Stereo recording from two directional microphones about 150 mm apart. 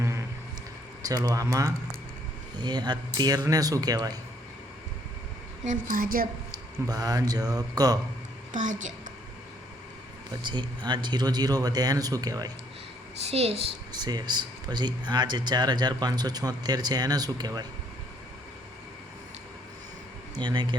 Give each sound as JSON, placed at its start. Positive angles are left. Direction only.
{"t": 1.0, "sound": "speech", "side_deg": -25}
{"t": 5.6, "sound": "a woman's voice", "side_deg": -65}
{"t": 6.8, "sound": "speech", "side_deg": -25}
{"t": 8.5, "sound": "a woman's voice", "side_deg": -55}
{"t": 10.4, "sound": "speech", "side_deg": -30}
{"t": 13.2, "sound": "a child's voice", "side_deg": -45}
{"t": 13.9, "sound": "speech", "side_deg": -25}
{"t": 20.4, "sound": "speech", "side_deg": -30}